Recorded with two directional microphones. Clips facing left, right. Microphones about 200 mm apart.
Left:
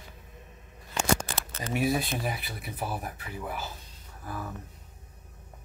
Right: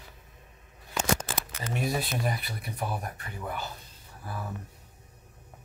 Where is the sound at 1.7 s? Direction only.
5° left (ahead or behind).